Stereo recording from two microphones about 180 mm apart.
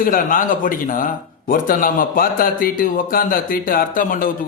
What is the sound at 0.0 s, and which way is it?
A man's voice, 50° left (ahead or behind).